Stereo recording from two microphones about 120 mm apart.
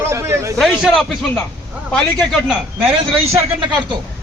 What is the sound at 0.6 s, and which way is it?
Speech, centre (ahead or behind).